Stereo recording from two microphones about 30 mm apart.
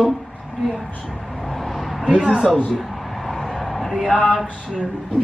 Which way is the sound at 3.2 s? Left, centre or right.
Centre.